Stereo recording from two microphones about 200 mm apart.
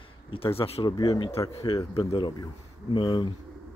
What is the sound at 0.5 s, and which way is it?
Speech, 30° left (ahead or behind).